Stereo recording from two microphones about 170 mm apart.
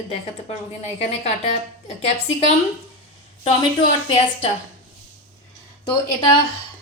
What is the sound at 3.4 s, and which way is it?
Speech, 35° left (ahead or behind).